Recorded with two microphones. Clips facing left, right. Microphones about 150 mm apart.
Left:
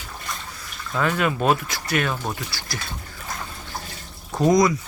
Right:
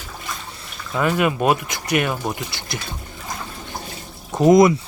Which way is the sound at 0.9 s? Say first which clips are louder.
Right 3 dB; 10° right (ahead or behind).